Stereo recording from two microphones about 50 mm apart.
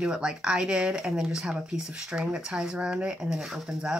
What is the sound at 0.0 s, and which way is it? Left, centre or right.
Speech, centre.